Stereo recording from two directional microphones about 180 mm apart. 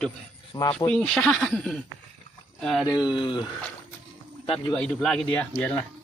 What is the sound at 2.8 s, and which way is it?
Speech, 25° left (ahead or behind).